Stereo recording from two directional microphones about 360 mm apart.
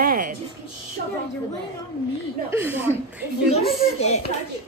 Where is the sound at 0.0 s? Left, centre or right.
Right.